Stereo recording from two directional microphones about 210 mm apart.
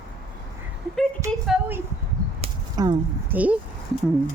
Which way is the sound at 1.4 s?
5° right (ahead or behind).